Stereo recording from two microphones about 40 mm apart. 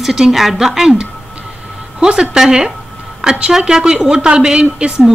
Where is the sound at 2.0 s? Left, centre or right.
Centre.